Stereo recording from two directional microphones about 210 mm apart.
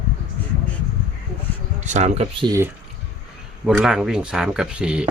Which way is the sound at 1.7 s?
35° right (ahead or behind).